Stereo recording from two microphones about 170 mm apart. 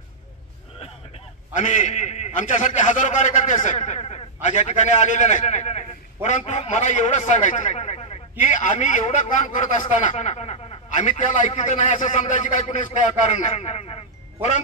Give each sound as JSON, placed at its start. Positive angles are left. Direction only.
{"t": 1.6, "sound": "a man's voice", "side_deg": 45}